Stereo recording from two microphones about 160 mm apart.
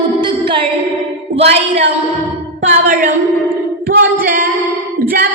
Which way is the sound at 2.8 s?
60° right (ahead or behind).